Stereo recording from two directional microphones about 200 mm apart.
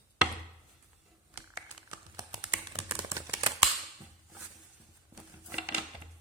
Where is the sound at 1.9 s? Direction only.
20° right (ahead or behind).